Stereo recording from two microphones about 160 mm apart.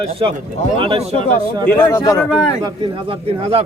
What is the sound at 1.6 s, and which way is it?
Speech, 15° left (ahead or behind).